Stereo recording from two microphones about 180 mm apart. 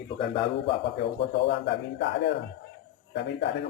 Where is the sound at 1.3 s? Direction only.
75° left (ahead or behind).